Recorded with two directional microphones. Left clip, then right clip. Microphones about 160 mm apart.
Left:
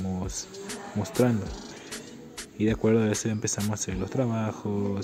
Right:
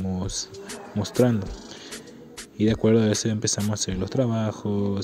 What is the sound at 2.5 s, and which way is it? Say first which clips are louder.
Speech: right 3 dB; 35° right (ahead or behind).